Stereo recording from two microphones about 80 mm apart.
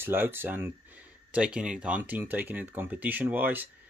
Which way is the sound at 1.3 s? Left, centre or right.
Centre.